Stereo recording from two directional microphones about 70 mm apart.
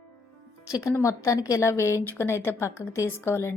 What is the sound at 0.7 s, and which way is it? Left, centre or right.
A woman's voice, left.